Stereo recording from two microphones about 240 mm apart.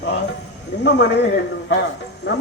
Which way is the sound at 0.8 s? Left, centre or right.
Left.